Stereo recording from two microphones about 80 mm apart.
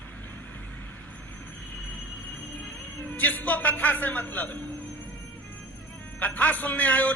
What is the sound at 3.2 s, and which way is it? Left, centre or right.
A man's voice, left.